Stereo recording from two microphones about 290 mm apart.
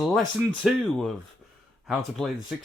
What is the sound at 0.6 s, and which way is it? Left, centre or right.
Speech, centre.